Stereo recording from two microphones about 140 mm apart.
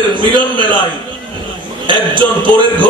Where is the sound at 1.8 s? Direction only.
35° right (ahead or behind).